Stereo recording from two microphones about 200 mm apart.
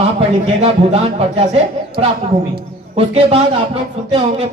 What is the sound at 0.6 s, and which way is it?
Speech, 30° right (ahead or behind).